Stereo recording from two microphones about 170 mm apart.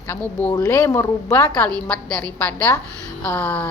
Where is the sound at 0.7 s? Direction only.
15° left (ahead or behind).